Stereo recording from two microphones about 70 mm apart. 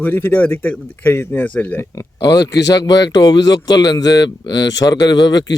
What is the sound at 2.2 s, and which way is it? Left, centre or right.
Speech, left.